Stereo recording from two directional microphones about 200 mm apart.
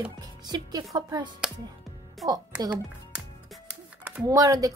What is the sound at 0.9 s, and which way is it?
Speech, 20° right (ahead or behind).